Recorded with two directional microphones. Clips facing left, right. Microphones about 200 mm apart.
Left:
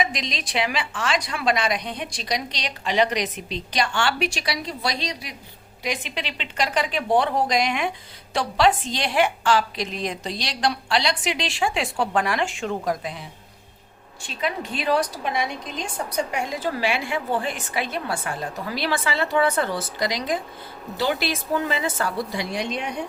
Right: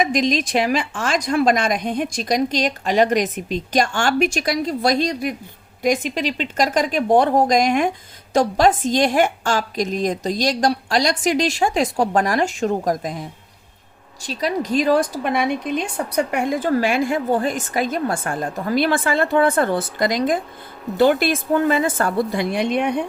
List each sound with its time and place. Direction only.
0.0 s speech: 45° right (ahead or behind)